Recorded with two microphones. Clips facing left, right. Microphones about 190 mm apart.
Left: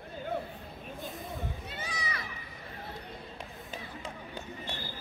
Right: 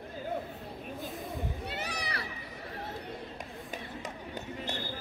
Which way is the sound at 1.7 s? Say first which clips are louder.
Right 2 dB; 65° right (ahead or behind).